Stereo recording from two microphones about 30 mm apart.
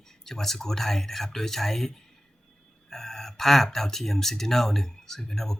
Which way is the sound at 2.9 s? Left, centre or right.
Centre.